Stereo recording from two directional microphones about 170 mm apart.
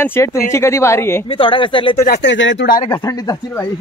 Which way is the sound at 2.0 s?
75° left (ahead or behind).